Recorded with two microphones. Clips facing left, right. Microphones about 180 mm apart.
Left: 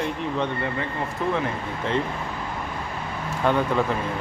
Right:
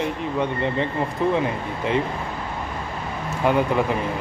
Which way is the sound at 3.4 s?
10° right (ahead or behind).